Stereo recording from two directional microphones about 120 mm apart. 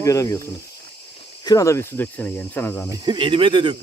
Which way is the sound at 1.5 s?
25° left (ahead or behind).